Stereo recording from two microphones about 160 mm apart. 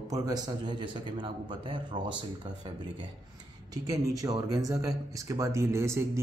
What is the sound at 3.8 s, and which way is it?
A man's voice, 20° right (ahead or behind).